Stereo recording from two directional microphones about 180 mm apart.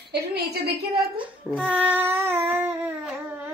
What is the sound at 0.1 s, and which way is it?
Speech, 65° right (ahead or behind).